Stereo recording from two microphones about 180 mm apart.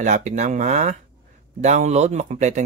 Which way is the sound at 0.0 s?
40° right (ahead or behind).